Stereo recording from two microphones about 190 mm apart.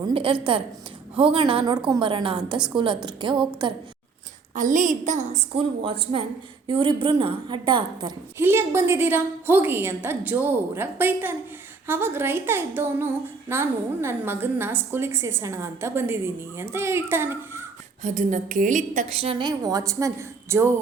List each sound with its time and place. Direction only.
0.1 s a woman's voice: 30° right (ahead or behind)
4.5 s a woman's voice: 40° right (ahead or behind)
5.5 s a woman's voice: 30° right (ahead or behind)
8.4 s a woman's voice: 10° right (ahead or behind)
18.0 s a woman's voice: 40° right (ahead or behind); by 20.7 s 15° right (ahead or behind)